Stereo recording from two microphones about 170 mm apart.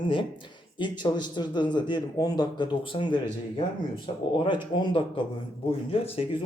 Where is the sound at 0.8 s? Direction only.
25° left (ahead or behind).